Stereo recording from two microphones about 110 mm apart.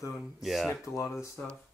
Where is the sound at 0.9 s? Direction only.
25° left (ahead or behind).